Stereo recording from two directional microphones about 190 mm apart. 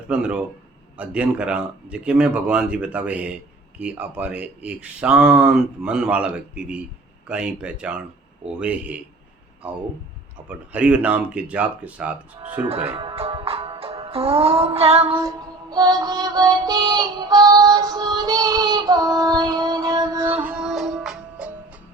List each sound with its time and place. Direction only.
0.1 s speech: 5° right (ahead or behind)
12.6 s speech: 30° right (ahead or behind)
15.2 s music: 20° right (ahead or behind)
20.4 s music: 5° right (ahead or behind)